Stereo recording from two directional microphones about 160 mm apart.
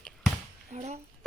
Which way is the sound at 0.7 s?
45° right (ahead or behind).